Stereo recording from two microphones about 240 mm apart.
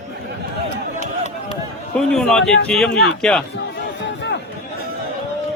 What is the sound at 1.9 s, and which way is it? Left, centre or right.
Speech, centre.